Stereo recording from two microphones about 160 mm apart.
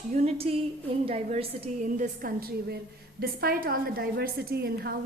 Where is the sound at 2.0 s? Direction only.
65° right (ahead or behind).